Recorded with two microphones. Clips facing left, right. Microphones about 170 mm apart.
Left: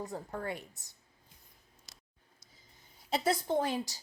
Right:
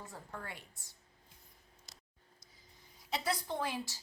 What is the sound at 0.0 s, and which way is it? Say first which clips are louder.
Speech: left 8 dB; 40° left (ahead or behind).